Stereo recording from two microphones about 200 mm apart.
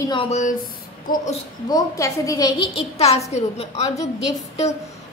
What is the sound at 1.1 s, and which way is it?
Speech, 45° left (ahead or behind).